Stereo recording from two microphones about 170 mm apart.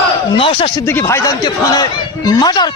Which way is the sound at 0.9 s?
15° left (ahead or behind).